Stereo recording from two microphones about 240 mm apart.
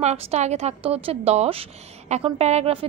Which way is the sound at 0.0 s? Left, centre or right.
Right.